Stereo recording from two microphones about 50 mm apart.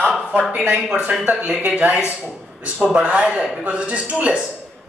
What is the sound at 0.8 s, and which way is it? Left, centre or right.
Speech, centre.